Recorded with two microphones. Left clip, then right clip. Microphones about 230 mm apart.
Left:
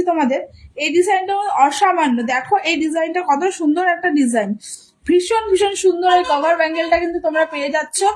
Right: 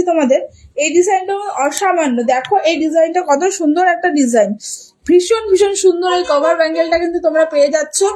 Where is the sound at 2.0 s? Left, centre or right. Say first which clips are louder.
Right 3 dB; centre.